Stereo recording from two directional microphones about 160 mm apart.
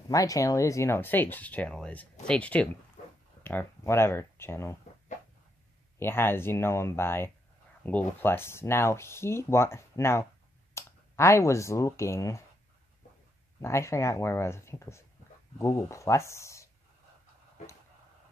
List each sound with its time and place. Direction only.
0.1 s speech: 20° left (ahead or behind)
5.9 s speech: 15° left (ahead or behind)
13.6 s speech: 15° left (ahead or behind)